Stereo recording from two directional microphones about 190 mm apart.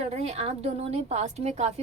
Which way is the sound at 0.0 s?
35° right (ahead or behind).